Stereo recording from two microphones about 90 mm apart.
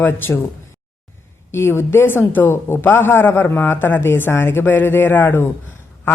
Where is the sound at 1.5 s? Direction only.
30° left (ahead or behind).